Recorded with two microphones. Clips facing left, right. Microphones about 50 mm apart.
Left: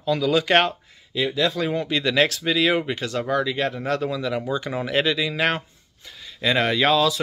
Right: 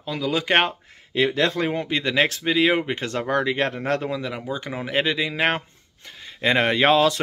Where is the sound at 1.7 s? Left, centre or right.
Right.